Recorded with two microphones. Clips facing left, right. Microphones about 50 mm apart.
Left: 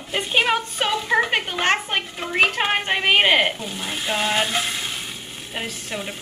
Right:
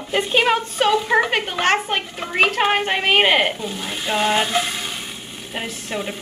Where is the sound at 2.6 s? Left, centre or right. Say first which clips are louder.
Right 3 dB; right.